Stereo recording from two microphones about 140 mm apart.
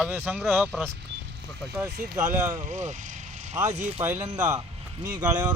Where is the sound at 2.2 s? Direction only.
60° right (ahead or behind).